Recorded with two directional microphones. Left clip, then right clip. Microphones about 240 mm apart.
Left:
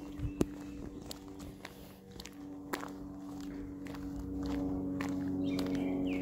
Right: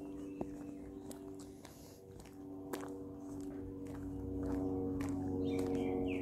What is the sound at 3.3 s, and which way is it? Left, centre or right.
Music, left.